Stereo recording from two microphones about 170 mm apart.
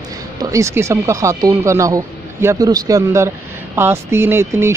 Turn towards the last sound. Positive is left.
turn(degrees=-15)  # may be behind; listen again after turning